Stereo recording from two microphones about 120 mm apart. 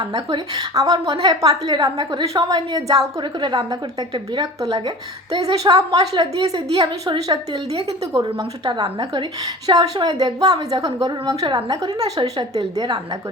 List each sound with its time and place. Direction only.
0.0 s a woman's voice: 30° right (ahead or behind)
5.5 s a woman's voice: 45° right (ahead or behind)
5.7 s a woman's voice: 30° right (ahead or behind)
8.6 s a woman's voice: 40° right (ahead or behind)